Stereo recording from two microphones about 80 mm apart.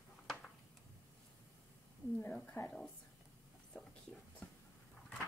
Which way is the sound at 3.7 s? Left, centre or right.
Centre.